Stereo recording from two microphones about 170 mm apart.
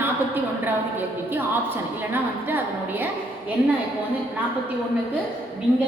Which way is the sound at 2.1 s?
10° right (ahead or behind).